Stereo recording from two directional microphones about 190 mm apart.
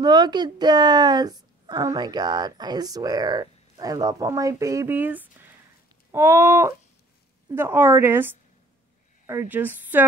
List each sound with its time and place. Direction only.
0.0 s a woman's voice: 20° right (ahead or behind)